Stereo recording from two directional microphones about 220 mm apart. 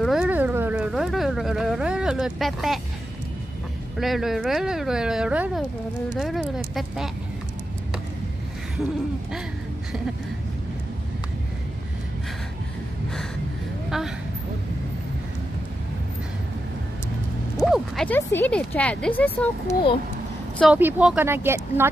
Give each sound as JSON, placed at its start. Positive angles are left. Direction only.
{"t": 0.0, "sound": "speech", "side_deg": -5}
{"t": 4.0, "sound": "speech", "side_deg": 0}
{"t": 13.8, "sound": "a woman's voice", "side_deg": 0}
{"t": 17.6, "sound": "speech", "side_deg": 0}
{"t": 19.7, "sound": "a child's voice", "side_deg": 25}
{"t": 20.5, "sound": "speech", "side_deg": -5}